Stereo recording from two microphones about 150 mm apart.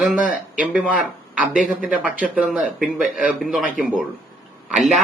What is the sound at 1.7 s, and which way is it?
Speech, 5° right (ahead or behind).